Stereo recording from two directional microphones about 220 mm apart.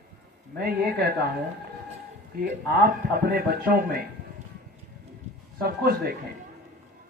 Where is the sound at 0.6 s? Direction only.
45° right (ahead or behind).